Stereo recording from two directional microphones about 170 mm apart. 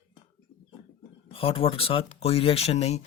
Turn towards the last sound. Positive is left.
turn(degrees=40)  # may be behind; listen again after turning